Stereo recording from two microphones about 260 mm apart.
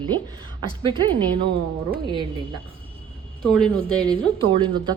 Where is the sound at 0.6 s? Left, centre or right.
Centre.